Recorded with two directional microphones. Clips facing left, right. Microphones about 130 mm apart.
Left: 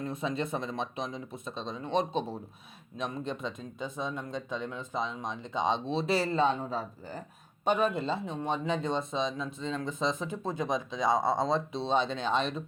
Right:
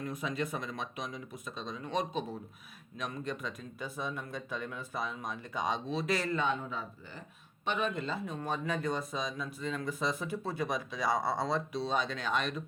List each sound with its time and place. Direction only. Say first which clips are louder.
0.0 s speech: left 3 dB; 25° left (ahead or behind)